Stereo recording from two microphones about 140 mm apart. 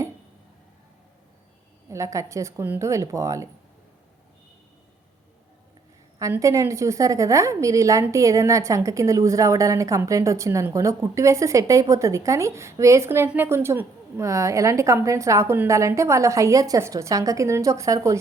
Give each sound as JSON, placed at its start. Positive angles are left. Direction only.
{"t": 1.9, "sound": "a woman's voice", "side_deg": -20}
{"t": 6.3, "sound": "a woman's voice", "side_deg": -20}